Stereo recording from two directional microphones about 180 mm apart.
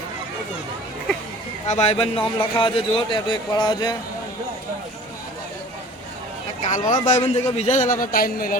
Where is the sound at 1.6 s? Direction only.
35° left (ahead or behind).